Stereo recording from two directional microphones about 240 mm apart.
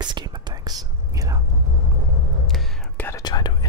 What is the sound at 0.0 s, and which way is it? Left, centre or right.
Whispering, centre.